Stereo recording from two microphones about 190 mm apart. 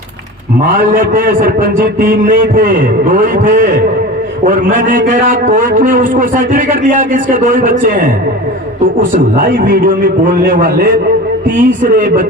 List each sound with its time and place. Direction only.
0.9 s a man's voice: 45° right (ahead or behind)
9.1 s a man's voice: 50° right (ahead or behind)